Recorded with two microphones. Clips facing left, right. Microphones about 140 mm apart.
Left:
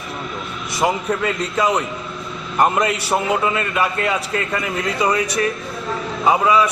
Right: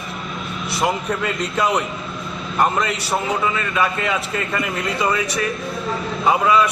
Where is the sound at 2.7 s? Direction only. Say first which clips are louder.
Left 3 dB; 20° left (ahead or behind).